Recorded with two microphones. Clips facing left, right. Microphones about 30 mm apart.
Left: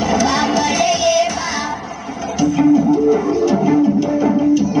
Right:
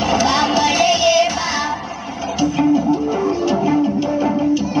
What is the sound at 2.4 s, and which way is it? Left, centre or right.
Music, centre.